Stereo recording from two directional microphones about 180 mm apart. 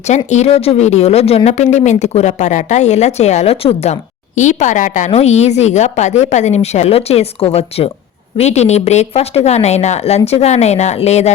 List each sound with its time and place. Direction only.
0.3 s speech: 40° left (ahead or behind)